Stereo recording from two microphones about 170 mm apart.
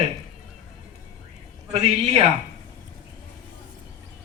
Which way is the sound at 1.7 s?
35° right (ahead or behind).